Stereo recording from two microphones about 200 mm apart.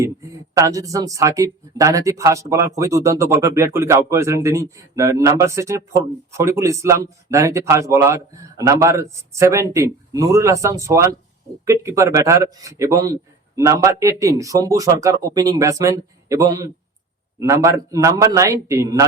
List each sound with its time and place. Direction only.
0.0 s speech: 15° right (ahead or behind)